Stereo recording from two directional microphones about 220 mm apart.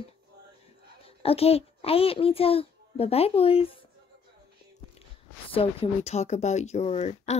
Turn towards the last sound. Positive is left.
turn(degrees=30)  # may be behind; listen again after turning